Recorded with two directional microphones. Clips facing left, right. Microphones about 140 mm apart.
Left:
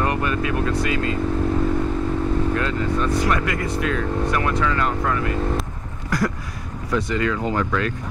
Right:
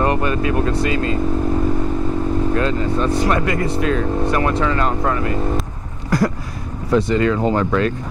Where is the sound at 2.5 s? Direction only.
30° right (ahead or behind).